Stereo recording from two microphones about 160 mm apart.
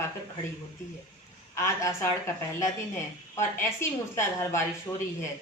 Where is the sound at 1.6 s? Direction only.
20° left (ahead or behind).